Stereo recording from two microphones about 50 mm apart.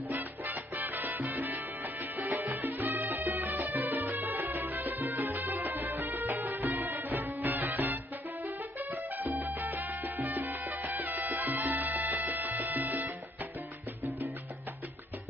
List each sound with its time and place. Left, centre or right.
0.1 s salsa music: right
1.2 s music: right